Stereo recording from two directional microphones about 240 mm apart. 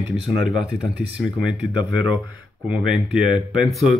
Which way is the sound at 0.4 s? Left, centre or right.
Centre.